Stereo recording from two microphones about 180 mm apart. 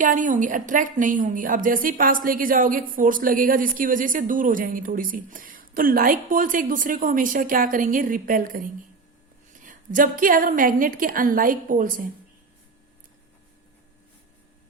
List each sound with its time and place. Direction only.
0.0 s a woman's voice: 45° right (ahead or behind)